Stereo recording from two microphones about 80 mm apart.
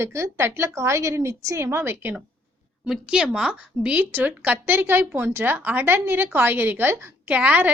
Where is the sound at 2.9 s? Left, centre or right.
Centre; by 7.1 s right.